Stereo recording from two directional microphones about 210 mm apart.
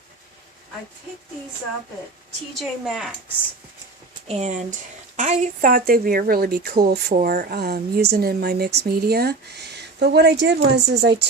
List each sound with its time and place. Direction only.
2.6 s a woman's voice: centre (ahead or behind)
4.3 s speech: 30° right (ahead or behind); by 11.3 s 55° right (ahead or behind)